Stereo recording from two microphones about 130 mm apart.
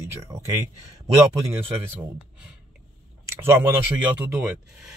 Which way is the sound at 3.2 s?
20° right (ahead or behind).